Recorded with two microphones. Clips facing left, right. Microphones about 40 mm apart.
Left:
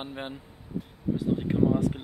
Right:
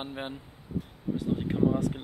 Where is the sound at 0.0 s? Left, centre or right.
Centre.